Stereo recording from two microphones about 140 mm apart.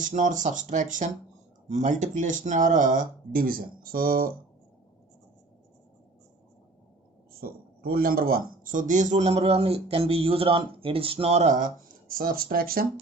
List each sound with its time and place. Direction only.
0.1 s speech: 65° right (ahead or behind); by 4.3 s 90° right
7.3 s a man's voice: 90° right; by 11.7 s 60° right (ahead or behind)
12.1 s speech: 90° right